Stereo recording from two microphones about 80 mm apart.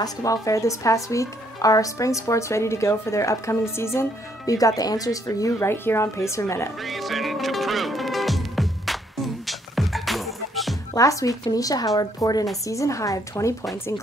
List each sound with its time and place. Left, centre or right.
0.0 s speech: left
5.7 s speech: left
6.8 s music: centre
11.0 s speech: left
12.6 s speech: left